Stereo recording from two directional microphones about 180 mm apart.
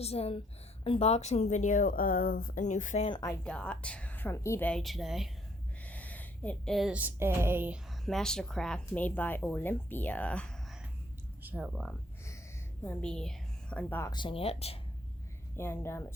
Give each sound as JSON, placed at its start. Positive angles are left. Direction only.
{"t": 0.0, "sound": "speech", "side_deg": 35}
{"t": 3.1, "sound": "a woman's voice", "side_deg": 20}
{"t": 3.4, "sound": "a woman's voice", "side_deg": 5}
{"t": 5.8, "sound": "a woman's voice", "side_deg": 10}
{"t": 8.0, "sound": "a woman's voice", "side_deg": 5}
{"t": 11.4, "sound": "a woman's voice", "side_deg": -5}
{"t": 14.1, "sound": "speech", "side_deg": 25}
{"t": 15.5, "sound": "a woman's voice", "side_deg": 15}